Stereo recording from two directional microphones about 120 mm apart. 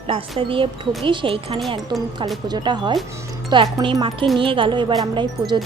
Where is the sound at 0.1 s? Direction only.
50° right (ahead or behind).